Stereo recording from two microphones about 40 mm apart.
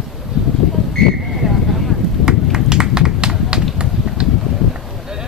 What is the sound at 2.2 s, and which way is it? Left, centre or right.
Run, centre.